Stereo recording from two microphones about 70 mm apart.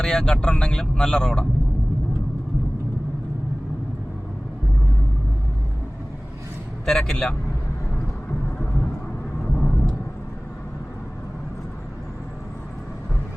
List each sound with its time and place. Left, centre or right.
0.0 s speech: centre
6.8 s speech: centre
9.6 s vehicle: centre